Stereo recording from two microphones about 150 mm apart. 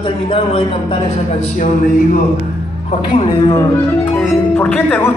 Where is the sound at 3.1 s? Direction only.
30° left (ahead or behind).